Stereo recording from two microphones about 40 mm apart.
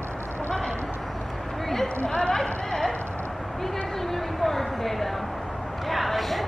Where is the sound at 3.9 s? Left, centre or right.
Centre.